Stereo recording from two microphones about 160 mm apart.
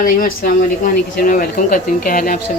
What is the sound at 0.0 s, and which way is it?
Speech, 60° left (ahead or behind).